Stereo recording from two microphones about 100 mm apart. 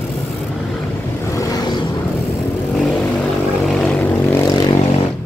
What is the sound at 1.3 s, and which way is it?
Vehicle, 40° left (ahead or behind).